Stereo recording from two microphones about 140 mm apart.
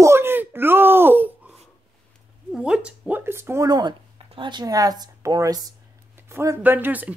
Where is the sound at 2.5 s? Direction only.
5° right (ahead or behind).